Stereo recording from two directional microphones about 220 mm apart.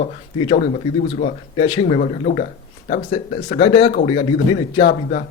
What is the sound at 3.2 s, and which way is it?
A man's voice, 25° left (ahead or behind).